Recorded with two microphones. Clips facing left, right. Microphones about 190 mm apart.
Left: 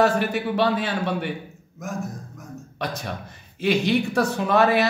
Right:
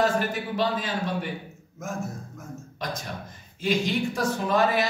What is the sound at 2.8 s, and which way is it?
Speech, 65° left (ahead or behind).